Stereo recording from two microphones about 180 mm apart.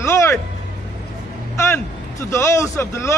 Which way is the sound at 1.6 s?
15° left (ahead or behind).